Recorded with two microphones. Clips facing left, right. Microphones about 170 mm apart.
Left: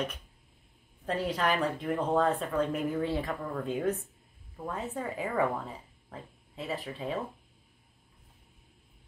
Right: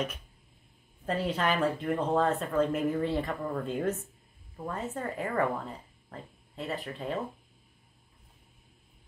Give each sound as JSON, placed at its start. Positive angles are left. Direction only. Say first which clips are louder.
{"t": 1.0, "sound": "speech", "louder": "even", "side_deg": 0}